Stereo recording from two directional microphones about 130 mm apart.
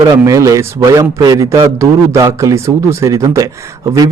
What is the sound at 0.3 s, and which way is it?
A man's voice, 25° right (ahead or behind).